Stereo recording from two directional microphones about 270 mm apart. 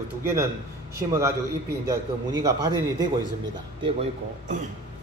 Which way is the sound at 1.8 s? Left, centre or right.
Centre.